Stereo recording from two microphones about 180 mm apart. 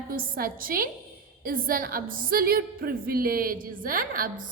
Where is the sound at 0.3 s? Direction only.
55° right (ahead or behind).